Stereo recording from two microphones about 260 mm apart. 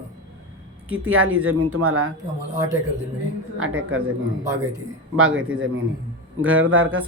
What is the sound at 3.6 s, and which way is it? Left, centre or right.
Speech, right.